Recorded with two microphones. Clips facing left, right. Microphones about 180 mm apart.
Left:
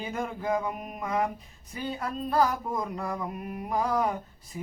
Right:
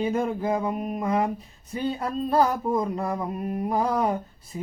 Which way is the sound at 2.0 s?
30° right (ahead or behind).